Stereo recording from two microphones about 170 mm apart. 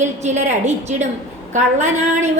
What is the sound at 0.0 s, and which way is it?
A woman's voice, 45° right (ahead or behind).